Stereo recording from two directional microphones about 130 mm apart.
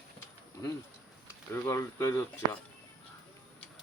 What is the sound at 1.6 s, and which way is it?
Speech, 20° left (ahead or behind).